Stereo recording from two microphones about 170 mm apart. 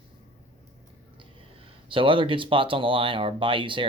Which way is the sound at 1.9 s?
30° right (ahead or behind).